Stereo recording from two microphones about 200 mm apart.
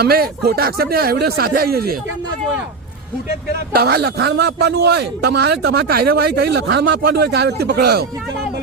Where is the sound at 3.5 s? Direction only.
50° right (ahead or behind).